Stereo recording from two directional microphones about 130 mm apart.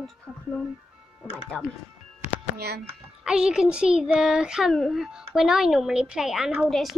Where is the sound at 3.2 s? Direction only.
5° right (ahead or behind).